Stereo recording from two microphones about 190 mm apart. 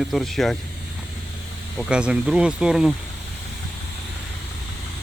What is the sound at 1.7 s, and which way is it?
Speech, 5° right (ahead or behind).